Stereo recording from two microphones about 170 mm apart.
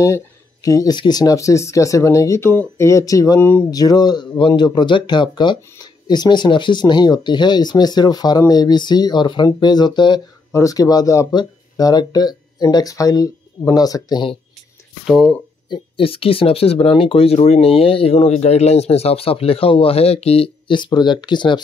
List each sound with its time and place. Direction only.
0.0 s speech: 20° left (ahead or behind)
15.0 s speech: centre (ahead or behind)
15.7 s speech: 35° left (ahead or behind)